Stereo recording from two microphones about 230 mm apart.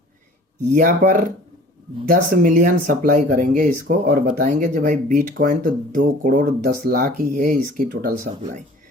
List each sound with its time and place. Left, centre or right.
0.7 s speech: right